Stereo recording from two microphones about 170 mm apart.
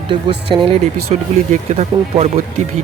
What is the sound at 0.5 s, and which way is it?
Speech, 30° right (ahead or behind).